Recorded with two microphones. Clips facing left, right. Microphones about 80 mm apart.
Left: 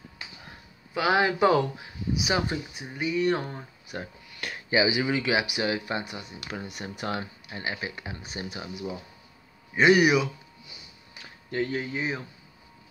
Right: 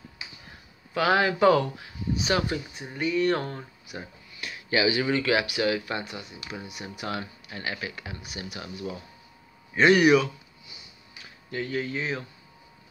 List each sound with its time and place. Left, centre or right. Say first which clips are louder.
0.9 s speech: right 1 dB; centre
3.8 s a sound: left 3 dB; left
4.6 s speech: even; centre
6.5 s speech: left 2 dB; left
7.2 s speech: even; left
9.8 s speech: right 1 dB; centre
11.5 s speech: left 2 dB; left
11.8 s speech: even; centre